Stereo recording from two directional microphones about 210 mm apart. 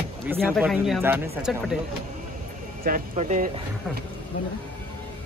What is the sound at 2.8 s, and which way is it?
Speech, 35° right (ahead or behind).